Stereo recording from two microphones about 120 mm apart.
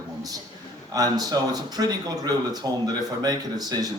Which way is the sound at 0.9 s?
35° right (ahead or behind).